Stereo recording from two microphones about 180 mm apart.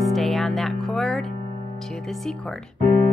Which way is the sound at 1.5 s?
35° right (ahead or behind).